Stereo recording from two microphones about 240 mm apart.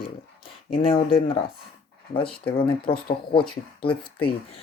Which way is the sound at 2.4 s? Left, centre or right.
Left.